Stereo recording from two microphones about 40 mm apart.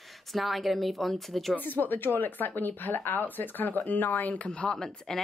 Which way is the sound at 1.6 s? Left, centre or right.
Left.